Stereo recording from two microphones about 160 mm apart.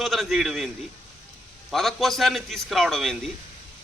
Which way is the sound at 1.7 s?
Centre (ahead or behind).